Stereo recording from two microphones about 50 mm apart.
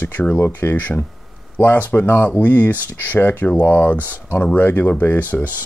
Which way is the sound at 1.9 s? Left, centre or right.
Left.